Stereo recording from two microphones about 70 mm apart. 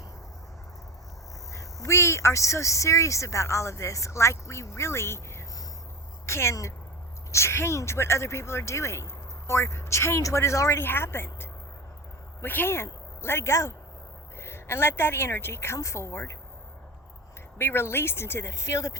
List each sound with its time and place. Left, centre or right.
1.5 s speech: left
6.2 s a woman's voice: left
10.8 s a woman's voice: left
17.6 s a woman's voice: left